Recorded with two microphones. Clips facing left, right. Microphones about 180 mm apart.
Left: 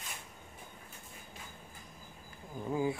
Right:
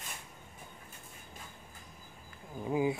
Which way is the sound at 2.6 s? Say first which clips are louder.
Right 2 dB; 15° right (ahead or behind).